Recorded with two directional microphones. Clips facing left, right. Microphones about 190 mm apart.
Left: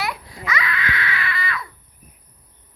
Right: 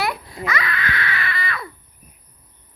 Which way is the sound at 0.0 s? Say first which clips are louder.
Right 4 dB; 55° right (ahead or behind).